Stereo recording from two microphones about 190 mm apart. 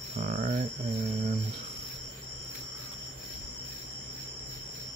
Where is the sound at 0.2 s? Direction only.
45° right (ahead or behind).